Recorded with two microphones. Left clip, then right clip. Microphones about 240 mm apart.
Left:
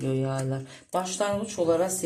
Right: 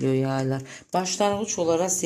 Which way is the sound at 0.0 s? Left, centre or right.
Right.